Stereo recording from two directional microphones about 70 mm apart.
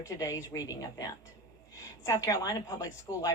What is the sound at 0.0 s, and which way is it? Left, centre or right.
A woman's voice, left.